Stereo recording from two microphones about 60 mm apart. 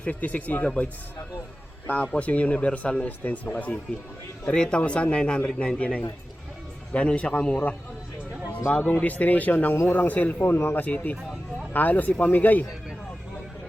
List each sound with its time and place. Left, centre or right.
0.0 s a man's voice: left
1.9 s a man's voice: left
4.4 s a man's voice: centre
8.8 s a man's voice: left
10.4 s speech: left
10.8 s a man's voice: left